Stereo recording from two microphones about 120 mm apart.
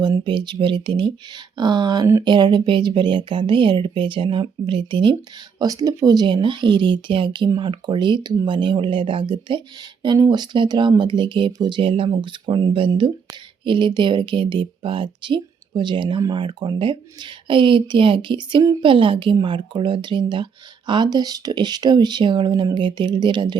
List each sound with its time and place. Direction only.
0.0 s a woman's voice: 40° right (ahead or behind)
5.5 s a woman's voice: 30° right (ahead or behind)